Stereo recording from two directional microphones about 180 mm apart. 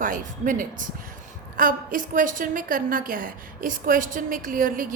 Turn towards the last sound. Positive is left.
turn(degrees=-50)  # may be behind; listen again after turning